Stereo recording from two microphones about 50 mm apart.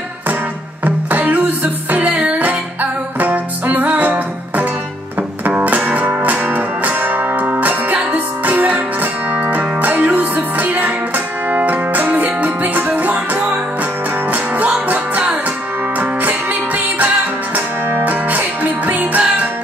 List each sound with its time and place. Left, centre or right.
0.8 s music: right
2.3 s music: right
14.9 s music: right